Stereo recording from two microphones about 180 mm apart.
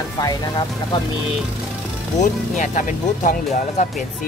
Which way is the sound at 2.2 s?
45° left (ahead or behind).